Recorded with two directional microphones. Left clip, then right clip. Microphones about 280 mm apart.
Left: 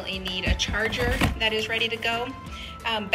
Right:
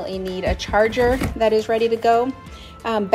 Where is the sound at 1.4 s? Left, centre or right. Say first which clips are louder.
Right 7 dB; right.